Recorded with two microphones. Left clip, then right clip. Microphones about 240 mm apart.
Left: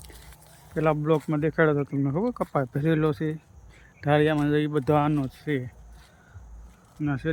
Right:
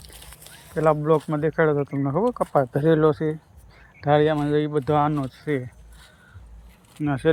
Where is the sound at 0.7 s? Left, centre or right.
Centre.